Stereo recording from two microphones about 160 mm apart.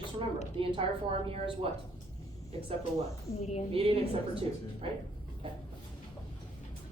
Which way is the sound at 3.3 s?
40° left (ahead or behind).